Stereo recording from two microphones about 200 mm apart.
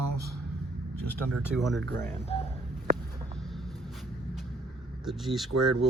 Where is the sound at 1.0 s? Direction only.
10° left (ahead or behind).